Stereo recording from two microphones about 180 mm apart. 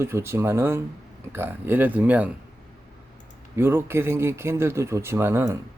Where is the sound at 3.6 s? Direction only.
15° right (ahead or behind).